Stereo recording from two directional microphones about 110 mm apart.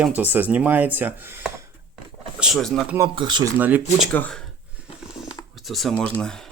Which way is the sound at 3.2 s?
45° right (ahead or behind).